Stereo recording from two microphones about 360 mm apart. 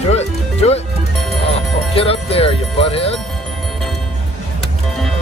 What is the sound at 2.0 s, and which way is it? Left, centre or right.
Music, centre.